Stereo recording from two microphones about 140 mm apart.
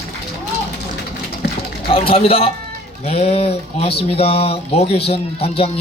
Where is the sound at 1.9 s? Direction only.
45° left (ahead or behind).